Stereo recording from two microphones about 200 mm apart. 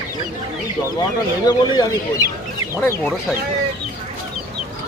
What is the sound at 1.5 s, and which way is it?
Speech, 20° left (ahead or behind).